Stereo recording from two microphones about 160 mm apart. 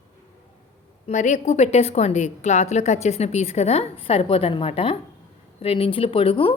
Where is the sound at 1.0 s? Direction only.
45° left (ahead or behind).